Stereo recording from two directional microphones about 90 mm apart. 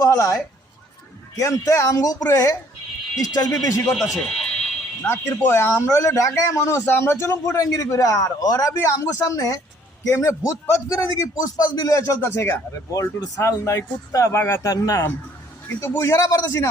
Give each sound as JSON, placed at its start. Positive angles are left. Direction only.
{"t": 0.0, "sound": "a man's voice", "side_deg": 35}
{"t": 3.6, "sound": "a man's voice", "side_deg": 35}
{"t": 3.9, "sound": "speech", "side_deg": 5}
{"t": 5.0, "sound": "a man's voice", "side_deg": 30}